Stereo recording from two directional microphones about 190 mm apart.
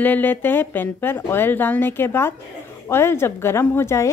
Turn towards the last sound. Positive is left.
turn(degrees=15)  # may be behind; listen again after turning